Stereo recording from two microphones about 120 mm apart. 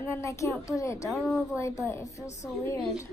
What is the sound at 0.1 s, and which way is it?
A woman's voice, 25° left (ahead or behind).